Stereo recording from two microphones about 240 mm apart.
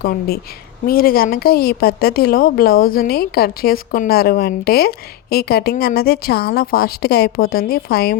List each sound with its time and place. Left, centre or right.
0.0 s speech: left